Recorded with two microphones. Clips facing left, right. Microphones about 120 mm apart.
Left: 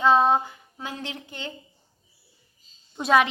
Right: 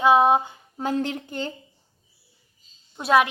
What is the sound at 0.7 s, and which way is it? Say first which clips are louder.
Speech: right 10 dB; 45° right (ahead or behind).